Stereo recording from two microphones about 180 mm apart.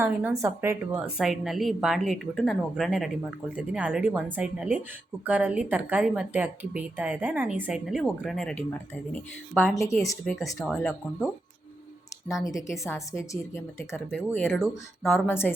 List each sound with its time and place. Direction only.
0.0 s a woman's voice: 10° right (ahead or behind); by 8.6 s 5° left (ahead or behind)
10.0 s a woman's voice: 15° left (ahead or behind)
10.6 s a woman's voice: centre (ahead or behind)
12.5 s a woman's voice: 15° left (ahead or behind); by 15.2 s centre (ahead or behind)
15.3 s a woman's voice: 15° left (ahead or behind)